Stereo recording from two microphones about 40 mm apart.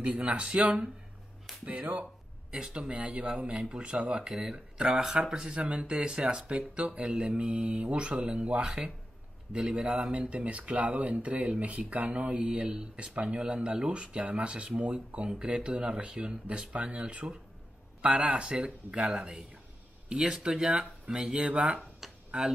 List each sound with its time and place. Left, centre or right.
0.1 s speech: right
2.5 s speech: right
2.9 s speech: right
10.1 s speech: right
22.0 s tick-tock: centre